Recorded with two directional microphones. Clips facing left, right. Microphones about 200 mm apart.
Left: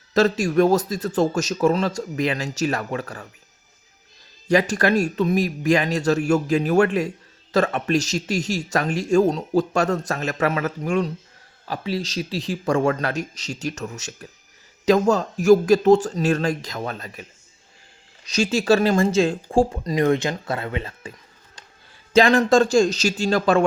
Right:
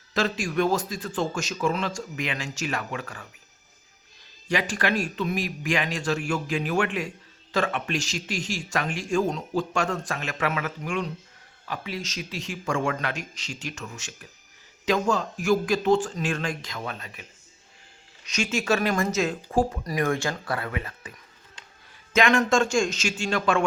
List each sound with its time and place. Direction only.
0.1 s speech: 40° left (ahead or behind)
4.4 s speech: 40° left (ahead or behind)
18.3 s speech: 35° left (ahead or behind)
22.1 s speech: 35° left (ahead or behind)